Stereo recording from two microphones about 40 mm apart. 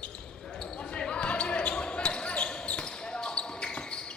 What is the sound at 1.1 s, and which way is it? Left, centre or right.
Basketball bounce, left.